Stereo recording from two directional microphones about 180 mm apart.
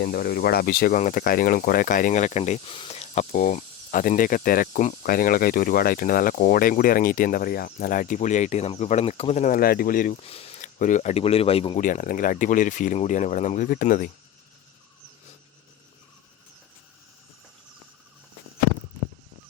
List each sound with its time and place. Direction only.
0.0 s speech: 60° left (ahead or behind); by 3.2 s 35° left (ahead or behind)
3.3 s speech: 50° left (ahead or behind)
10.2 s speech: 35° left (ahead or behind)
11.8 s speech: 45° left (ahead or behind)